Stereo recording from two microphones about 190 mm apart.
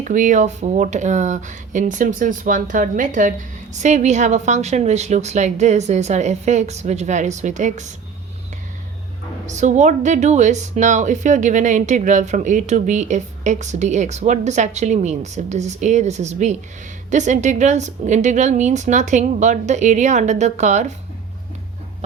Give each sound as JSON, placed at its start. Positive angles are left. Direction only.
{"t": 0.0, "sound": "speech", "side_deg": -40}
{"t": 9.5, "sound": "speech", "side_deg": -40}